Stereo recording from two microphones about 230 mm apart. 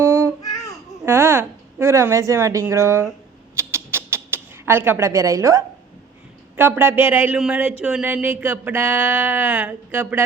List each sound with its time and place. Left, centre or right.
0.0 s babbling: centre
1.0 s a woman's voice: centre
3.5 s a sound: centre
6.6 s speech: centre